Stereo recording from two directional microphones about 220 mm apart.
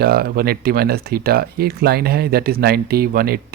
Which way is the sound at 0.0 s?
45° right (ahead or behind).